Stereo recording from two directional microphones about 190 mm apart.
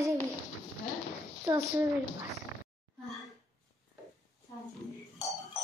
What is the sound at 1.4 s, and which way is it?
Speech, 15° right (ahead or behind).